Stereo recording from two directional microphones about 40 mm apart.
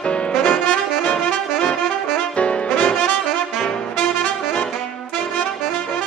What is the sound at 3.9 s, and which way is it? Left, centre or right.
Brass instrument, left.